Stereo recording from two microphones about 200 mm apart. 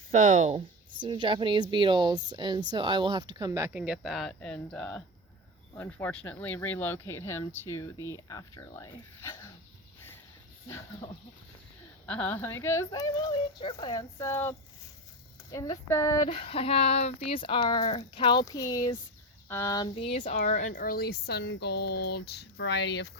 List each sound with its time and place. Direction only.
0.1 s speech: 40° right (ahead or behind); by 9.5 s 15° left (ahead or behind)
12.0 s speech: 10° left (ahead or behind)
15.5 s speech: 20° left (ahead or behind); by 23.0 s 60° left (ahead or behind)